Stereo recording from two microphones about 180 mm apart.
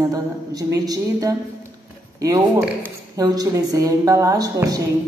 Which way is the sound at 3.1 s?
20° right (ahead or behind).